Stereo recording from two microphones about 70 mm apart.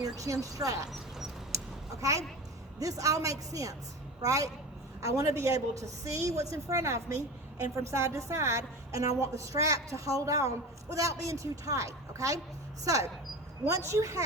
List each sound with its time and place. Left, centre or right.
0.0 s speech: right
1.5 s a sound: right
2.7 s a woman's voice: right